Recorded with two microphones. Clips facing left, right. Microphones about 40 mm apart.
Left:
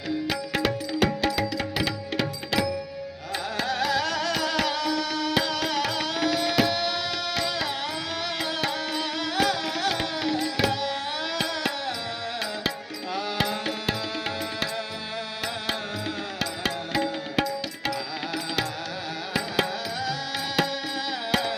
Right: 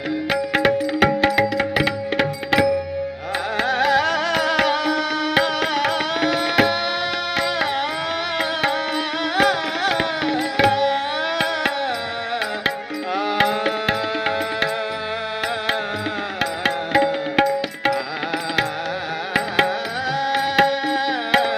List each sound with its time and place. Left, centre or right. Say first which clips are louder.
0.3 s music: right 11 dB; right
9.3 s music: right 7 dB; right
13.1 s music: right 8 dB; right
16.4 s music: right 8 dB; right
20.1 s music: right 9 dB; right